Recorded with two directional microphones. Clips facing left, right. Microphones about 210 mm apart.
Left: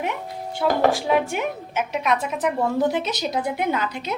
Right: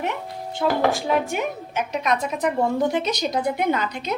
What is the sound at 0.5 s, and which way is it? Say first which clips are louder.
A woman's voice: left 1 dB; 10° left (ahead or behind).